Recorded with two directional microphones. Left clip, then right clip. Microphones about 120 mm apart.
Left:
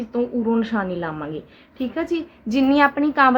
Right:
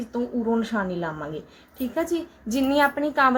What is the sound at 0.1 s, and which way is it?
A woman's voice, 35° left (ahead or behind).